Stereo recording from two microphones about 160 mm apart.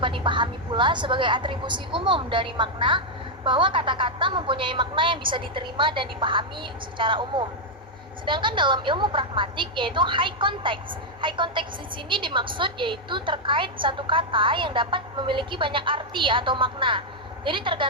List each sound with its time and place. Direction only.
0.0 s a woman's voice: 30° right (ahead or behind)